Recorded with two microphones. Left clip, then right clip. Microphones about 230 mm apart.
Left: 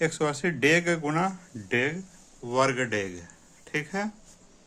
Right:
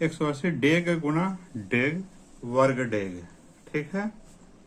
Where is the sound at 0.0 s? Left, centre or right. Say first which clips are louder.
Left 1 dB; left.